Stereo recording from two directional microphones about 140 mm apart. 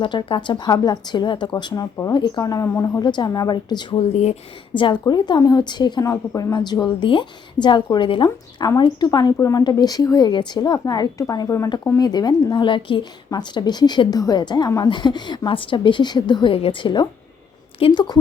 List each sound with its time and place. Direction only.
0.0 s a woman's voice: 35° left (ahead or behind)
4.1 s speech: 50° left (ahead or behind)
4.7 s a woman's voice: 35° left (ahead or behind)